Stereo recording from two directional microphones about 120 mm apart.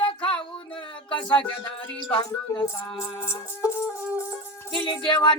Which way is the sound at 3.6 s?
25° left (ahead or behind).